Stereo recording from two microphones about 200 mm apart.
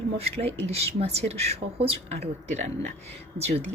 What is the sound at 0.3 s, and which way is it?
Speech, 30° right (ahead or behind).